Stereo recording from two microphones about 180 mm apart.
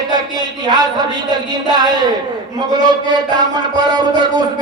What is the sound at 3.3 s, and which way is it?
A man's voice, 25° right (ahead or behind).